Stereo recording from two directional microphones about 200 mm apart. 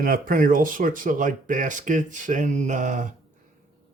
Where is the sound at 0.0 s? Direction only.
45° right (ahead or behind).